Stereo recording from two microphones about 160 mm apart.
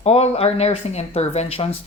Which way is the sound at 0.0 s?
40° left (ahead or behind).